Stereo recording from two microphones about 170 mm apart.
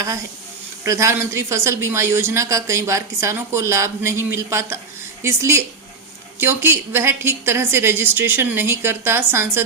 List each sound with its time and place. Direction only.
0.9 s speech: 20° right (ahead or behind)